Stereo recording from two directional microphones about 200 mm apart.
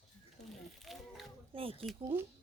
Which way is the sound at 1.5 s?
25° right (ahead or behind).